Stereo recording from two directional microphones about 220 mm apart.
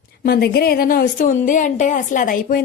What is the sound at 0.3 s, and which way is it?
A woman's voice, 45° left (ahead or behind).